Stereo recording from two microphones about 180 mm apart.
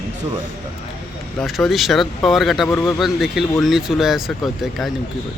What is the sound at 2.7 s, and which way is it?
Speech, 15° left (ahead or behind).